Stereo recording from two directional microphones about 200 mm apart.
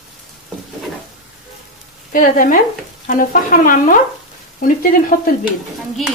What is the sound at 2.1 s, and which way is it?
Speech, 40° left (ahead or behind).